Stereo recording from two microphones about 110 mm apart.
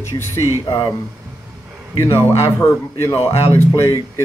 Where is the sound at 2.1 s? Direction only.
25° left (ahead or behind).